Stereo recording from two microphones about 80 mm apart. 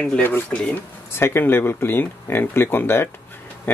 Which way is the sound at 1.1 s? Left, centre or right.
Left.